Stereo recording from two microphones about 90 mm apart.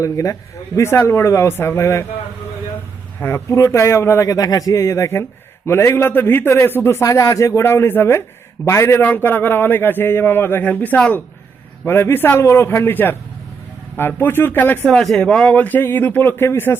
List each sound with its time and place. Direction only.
0.0 s a man's voice: 35° left (ahead or behind)
3.2 s a man's voice: 30° left (ahead or behind)
14.8 s a man's voice: 5° left (ahead or behind); by 16.7 s 25° left (ahead or behind)